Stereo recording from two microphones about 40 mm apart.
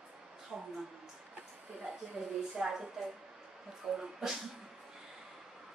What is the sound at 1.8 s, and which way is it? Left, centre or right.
A woman's voice, centre.